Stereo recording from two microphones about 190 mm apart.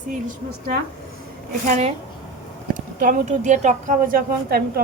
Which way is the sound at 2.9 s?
40° right (ahead or behind).